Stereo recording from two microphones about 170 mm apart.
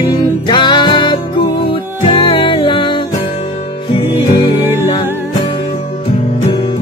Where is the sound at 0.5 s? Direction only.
25° left (ahead or behind).